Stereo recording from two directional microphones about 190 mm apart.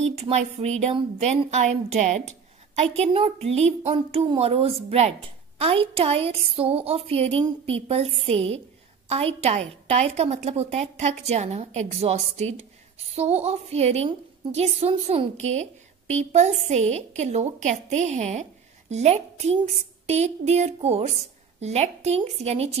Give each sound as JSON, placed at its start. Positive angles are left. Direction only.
{"t": 0.0, "sound": "a woman's voice", "side_deg": -35}